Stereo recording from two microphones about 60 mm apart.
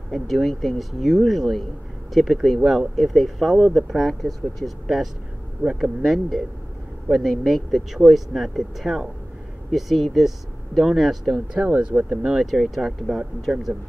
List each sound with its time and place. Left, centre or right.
0.1 s speech: centre
11.3 s speech: centre
11.9 s speech: right
12.3 s speech: centre